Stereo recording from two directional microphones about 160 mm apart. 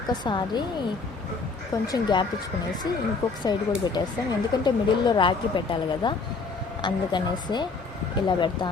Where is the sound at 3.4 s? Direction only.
25° left (ahead or behind).